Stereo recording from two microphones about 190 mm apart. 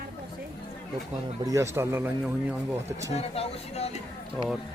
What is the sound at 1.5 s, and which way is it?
Speech, 15° right (ahead or behind).